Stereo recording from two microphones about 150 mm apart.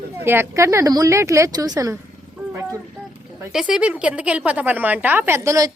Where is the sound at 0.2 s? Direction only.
15° right (ahead or behind).